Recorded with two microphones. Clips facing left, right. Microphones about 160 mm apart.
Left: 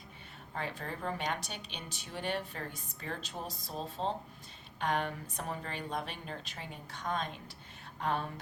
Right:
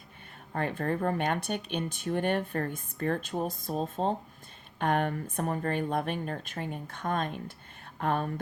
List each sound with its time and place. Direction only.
0.5 s speech: 50° right (ahead or behind)